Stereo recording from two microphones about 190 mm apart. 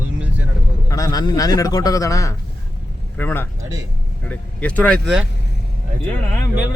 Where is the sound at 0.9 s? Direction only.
20° left (ahead or behind); by 5.2 s centre (ahead or behind).